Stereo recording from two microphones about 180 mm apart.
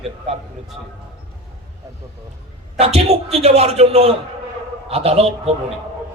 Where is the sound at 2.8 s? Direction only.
35° right (ahead or behind).